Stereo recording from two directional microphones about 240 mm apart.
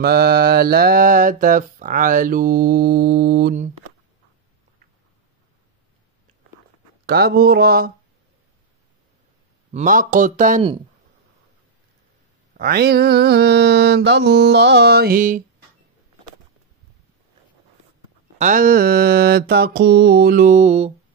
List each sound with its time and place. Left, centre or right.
0.0 s speech: right
7.1 s speech: right
9.7 s speech: right
12.5 s mantra: right
18.4 s speech: right